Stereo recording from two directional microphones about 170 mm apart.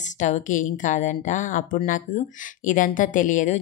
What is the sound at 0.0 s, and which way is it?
Speech, 45° left (ahead or behind).